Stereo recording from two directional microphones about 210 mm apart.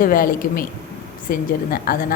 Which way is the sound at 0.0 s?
40° left (ahead or behind).